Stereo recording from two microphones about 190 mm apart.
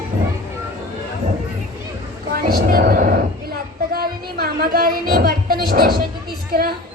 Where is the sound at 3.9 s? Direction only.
50° right (ahead or behind).